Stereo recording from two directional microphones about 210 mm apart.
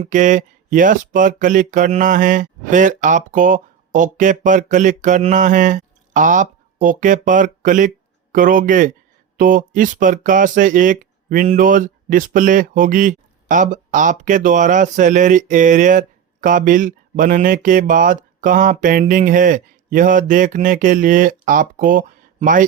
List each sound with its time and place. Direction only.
0.0 s speech: 35° right (ahead or behind)